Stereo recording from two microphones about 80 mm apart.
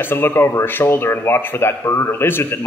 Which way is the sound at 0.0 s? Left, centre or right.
Left.